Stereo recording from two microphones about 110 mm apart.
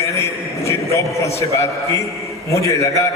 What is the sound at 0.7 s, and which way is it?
Speech, 25° left (ahead or behind).